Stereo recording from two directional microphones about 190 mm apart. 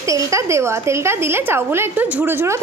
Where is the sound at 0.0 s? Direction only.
15° right (ahead or behind).